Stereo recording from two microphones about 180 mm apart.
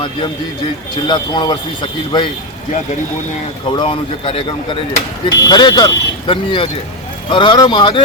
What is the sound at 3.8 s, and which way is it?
Speech, 30° left (ahead or behind).